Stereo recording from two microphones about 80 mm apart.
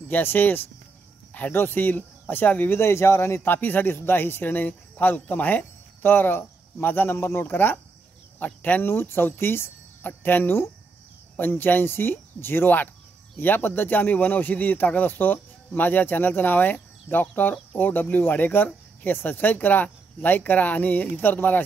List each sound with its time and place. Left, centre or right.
0.1 s speech: left